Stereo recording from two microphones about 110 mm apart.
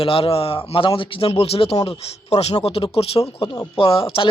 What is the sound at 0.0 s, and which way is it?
Speech, 55° left (ahead or behind).